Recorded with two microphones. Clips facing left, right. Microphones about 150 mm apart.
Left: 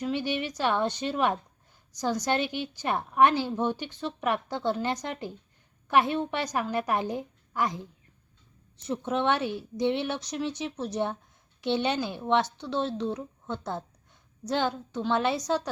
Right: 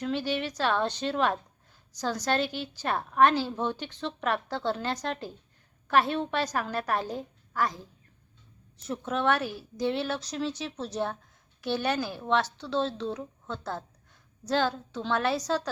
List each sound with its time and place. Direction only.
0.0 s a woman's voice: 15° left (ahead or behind)